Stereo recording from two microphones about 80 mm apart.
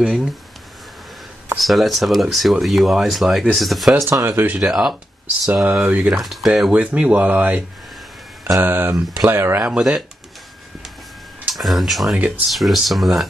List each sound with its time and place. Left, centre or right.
0.0 s speech: centre
1.6 s speech: centre
4.1 s speech: right
4.6 s speech: centre
5.5 s speech: centre
6.1 s speech: centre
6.7 s speech: centre
9.6 s speech: centre
11.5 s speech: centre